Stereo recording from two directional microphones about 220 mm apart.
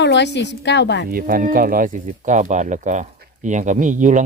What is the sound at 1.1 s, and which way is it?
Speech, 40° right (ahead or behind).